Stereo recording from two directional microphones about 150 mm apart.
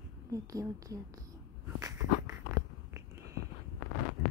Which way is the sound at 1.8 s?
20° right (ahead or behind).